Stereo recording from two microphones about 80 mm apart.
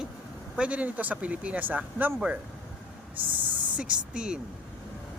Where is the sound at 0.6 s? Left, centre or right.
Centre.